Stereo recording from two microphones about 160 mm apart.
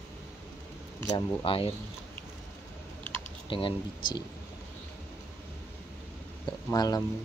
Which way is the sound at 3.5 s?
35° left (ahead or behind).